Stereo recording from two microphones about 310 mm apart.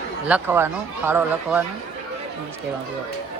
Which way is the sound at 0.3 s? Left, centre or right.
Centre.